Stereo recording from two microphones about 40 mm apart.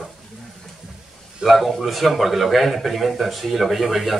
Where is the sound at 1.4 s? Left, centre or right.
Centre.